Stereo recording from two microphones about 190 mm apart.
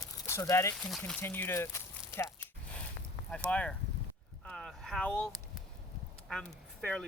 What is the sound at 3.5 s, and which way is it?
Speech, 5° left (ahead or behind).